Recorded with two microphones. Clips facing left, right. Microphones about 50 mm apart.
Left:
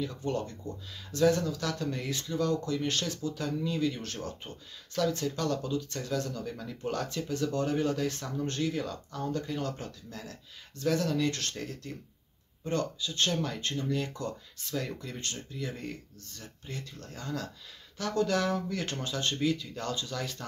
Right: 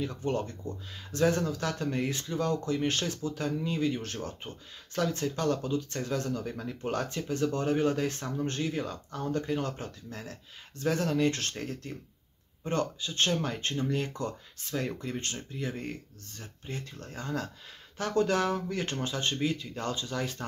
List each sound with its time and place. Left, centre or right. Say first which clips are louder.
0.2 s speech: right 2 dB; right